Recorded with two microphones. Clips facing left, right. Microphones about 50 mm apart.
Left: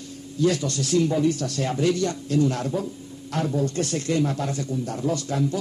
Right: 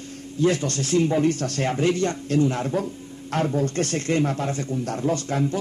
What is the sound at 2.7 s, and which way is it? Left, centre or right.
Speech, right.